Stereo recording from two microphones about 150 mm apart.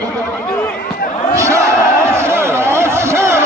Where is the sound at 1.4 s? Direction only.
20° right (ahead or behind).